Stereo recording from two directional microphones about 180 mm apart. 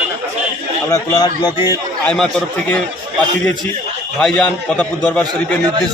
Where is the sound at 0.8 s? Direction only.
20° left (ahead or behind).